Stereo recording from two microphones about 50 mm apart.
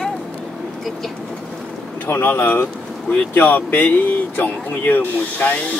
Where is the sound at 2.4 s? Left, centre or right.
Left.